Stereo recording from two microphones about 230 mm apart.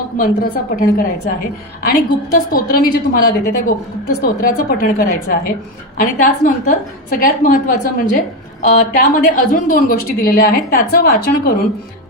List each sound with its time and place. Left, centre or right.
0.2 s a woman's voice: left